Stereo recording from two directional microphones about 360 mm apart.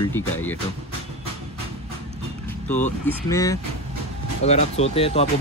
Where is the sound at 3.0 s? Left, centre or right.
Centre.